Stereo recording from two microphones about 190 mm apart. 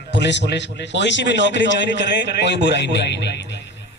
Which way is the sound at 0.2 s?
65° left (ahead or behind).